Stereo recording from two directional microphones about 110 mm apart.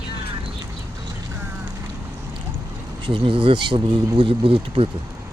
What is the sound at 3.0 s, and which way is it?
Speech, 50° right (ahead or behind).